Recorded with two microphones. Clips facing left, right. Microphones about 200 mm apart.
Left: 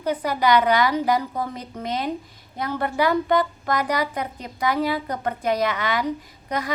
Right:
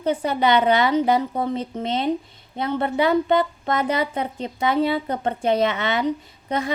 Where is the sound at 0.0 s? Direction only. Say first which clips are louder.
Right 2 dB; 25° right (ahead or behind).